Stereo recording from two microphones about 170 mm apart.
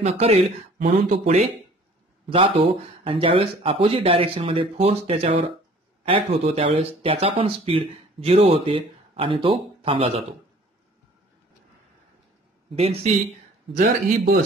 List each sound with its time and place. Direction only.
0.0 s speech: 40° right (ahead or behind)
12.7 s speech: 40° right (ahead or behind)
13.7 s a man's voice: 50° right (ahead or behind)